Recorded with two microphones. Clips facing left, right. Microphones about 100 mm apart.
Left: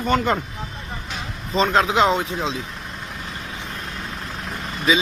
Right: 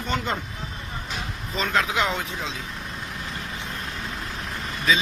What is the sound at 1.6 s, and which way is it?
Speech, 20° left (ahead or behind).